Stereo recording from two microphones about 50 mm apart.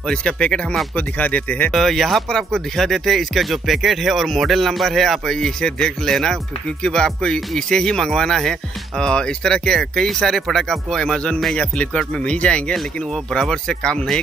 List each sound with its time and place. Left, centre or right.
0.1 s speech: centre
0.9 s speech: left
1.7 s speech: centre
11.5 s speech: left
13.3 s speech: centre